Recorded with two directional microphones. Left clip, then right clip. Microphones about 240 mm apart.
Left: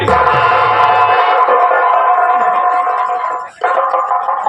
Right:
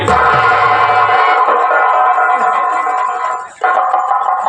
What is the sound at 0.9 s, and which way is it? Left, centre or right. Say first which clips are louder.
Music: even; centre.